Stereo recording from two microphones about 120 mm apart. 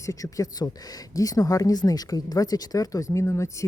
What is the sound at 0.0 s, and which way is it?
Speech, 25° left (ahead or behind).